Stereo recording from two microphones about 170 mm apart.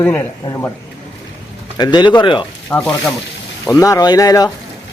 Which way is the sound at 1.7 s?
25° left (ahead or behind).